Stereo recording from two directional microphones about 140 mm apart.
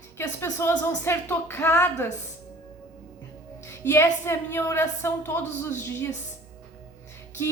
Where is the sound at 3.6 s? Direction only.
15° left (ahead or behind).